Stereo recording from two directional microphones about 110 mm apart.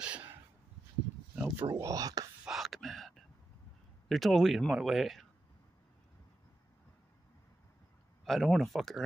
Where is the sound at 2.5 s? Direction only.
Centre (ahead or behind).